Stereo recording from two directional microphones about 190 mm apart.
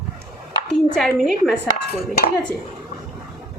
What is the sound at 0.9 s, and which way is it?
Speech, centre (ahead or behind).